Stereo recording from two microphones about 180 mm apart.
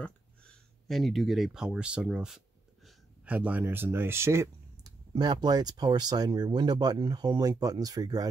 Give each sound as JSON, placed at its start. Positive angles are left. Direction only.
{"t": 0.0, "sound": "speech", "side_deg": 5}